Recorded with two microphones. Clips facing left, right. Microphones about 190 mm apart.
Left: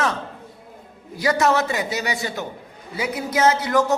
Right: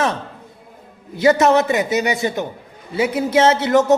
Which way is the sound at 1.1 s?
25° right (ahead or behind).